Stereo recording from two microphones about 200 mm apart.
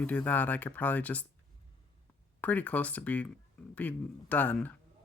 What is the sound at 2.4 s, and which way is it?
Speech, 10° left (ahead or behind).